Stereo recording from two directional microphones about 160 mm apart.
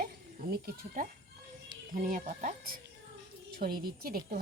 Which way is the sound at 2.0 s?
55° right (ahead or behind).